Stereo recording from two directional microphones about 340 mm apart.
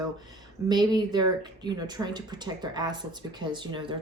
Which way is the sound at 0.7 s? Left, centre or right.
Centre.